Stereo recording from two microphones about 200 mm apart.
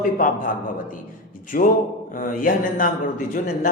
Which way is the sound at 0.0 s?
40° left (ahead or behind).